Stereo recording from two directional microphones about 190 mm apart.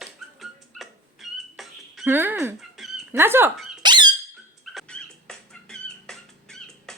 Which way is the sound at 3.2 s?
10° right (ahead or behind).